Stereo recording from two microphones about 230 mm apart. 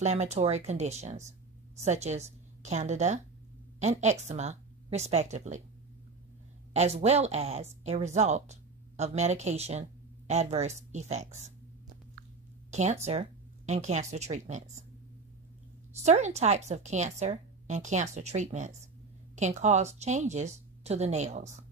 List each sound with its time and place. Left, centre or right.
0.0 s a woman's voice: right
6.7 s speech: right
12.7 s a woman's voice: right
16.0 s a woman's voice: right